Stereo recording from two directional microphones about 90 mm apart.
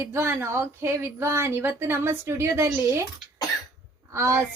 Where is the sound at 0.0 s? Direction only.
30° right (ahead or behind).